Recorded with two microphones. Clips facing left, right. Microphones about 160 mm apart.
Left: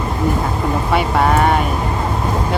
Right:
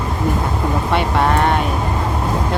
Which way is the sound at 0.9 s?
5° left (ahead or behind).